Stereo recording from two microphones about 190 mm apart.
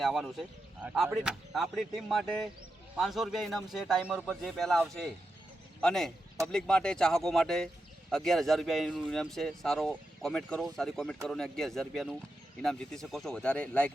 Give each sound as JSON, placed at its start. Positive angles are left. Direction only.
{"t": 0.0, "sound": "speech", "side_deg": 0}